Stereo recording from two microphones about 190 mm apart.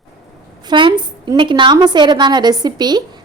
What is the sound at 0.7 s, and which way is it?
A woman's voice, 25° right (ahead or behind).